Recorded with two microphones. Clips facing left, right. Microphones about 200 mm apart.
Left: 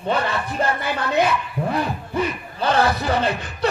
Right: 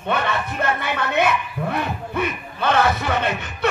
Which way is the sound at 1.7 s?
60° right (ahead or behind).